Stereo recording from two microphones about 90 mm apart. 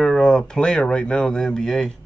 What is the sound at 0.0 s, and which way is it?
Speech, 5° left (ahead or behind).